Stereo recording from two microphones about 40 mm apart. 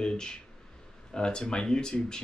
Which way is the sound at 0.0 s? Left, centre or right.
Centre.